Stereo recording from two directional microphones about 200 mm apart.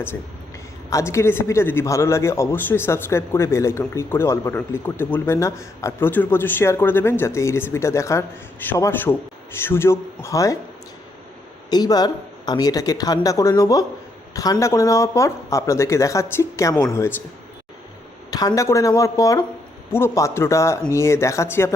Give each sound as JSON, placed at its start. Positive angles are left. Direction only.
{"t": 0.9, "sound": "a man's voice", "side_deg": 15}
{"t": 11.7, "sound": "a man's voice", "side_deg": 20}
{"t": 18.3, "sound": "a man's voice", "side_deg": 20}